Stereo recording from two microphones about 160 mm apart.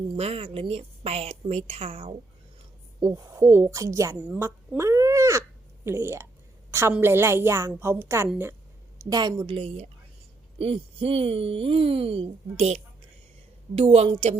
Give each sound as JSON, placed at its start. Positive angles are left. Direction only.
{"t": 0.1, "sound": "speech", "side_deg": -40}
{"t": 3.0, "sound": "a woman's voice", "side_deg": -20}
{"t": 4.8, "sound": "a sound", "side_deg": -20}
{"t": 6.7, "sound": "a woman's voice", "side_deg": -15}
{"t": 9.6, "sound": "speech", "side_deg": -40}